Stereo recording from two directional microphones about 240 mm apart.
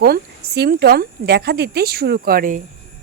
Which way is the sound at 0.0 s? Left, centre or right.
Right.